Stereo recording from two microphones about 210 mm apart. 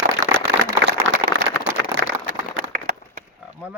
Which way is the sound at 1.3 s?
65° right (ahead or behind).